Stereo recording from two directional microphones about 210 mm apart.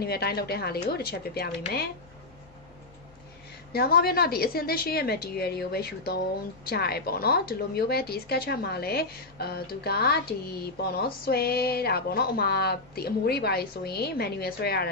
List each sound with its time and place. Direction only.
0.0 s a woman's voice: 50° left (ahead or behind)
3.7 s a woman's voice: 45° left (ahead or behind)
11.2 s a woman's voice: 50° left (ahead or behind)